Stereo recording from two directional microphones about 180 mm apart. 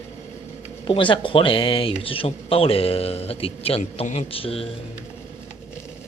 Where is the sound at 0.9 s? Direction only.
25° left (ahead or behind).